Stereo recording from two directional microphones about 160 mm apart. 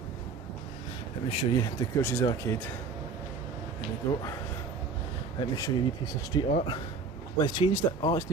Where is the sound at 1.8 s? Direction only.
15° left (ahead or behind).